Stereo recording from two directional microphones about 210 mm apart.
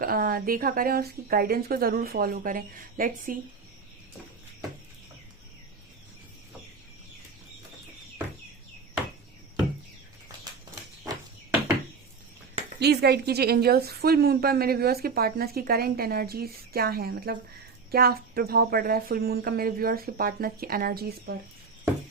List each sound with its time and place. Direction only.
0.0 s a woman's voice: 45° right (ahead or behind)
12.8 s a woman's voice: 50° right (ahead or behind)